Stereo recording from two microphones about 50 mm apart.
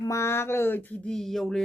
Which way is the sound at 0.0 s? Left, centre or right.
Left.